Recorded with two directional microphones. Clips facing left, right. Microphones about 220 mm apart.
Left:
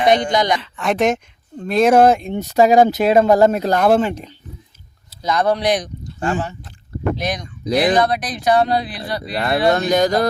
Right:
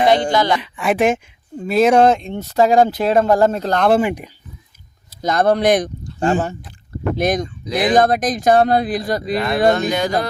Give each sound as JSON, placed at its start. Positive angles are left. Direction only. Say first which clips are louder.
{"t": 0.1, "sound": "speech", "louder": "right 1 dB", "side_deg": 20}
{"t": 0.6, "sound": "speech", "louder": "right 1 dB", "side_deg": -10}
{"t": 2.4, "sound": "speech", "louder": "left 2 dB", "side_deg": 15}
{"t": 3.9, "sound": "speech", "louder": "even", "side_deg": -15}
{"t": 5.2, "sound": "speech", "louder": "right 3 dB", "side_deg": -50}
{"t": 6.1, "sound": "speech", "louder": "right 4 dB", "side_deg": -40}
{"t": 7.6, "sound": "speech", "louder": "left 5 dB", "side_deg": 40}
{"t": 7.9, "sound": "speech", "louder": "right 3 dB", "side_deg": -45}
{"t": 9.7, "sound": "speech", "louder": "left 3 dB", "side_deg": 40}